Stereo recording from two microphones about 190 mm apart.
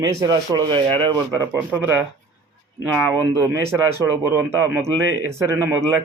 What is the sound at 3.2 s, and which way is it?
Speech, 15° right (ahead or behind).